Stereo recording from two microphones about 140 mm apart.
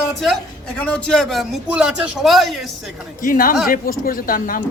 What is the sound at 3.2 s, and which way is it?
Speech, 85° left.